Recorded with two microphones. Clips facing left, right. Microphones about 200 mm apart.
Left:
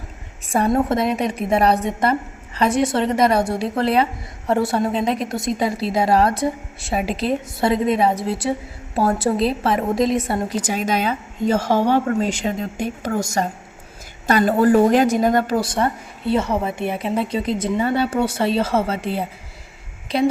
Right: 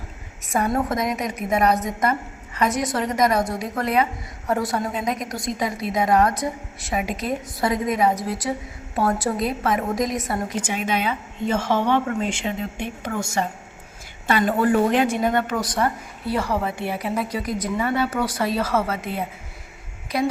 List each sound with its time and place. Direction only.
0.4 s a woman's voice: 30° left (ahead or behind)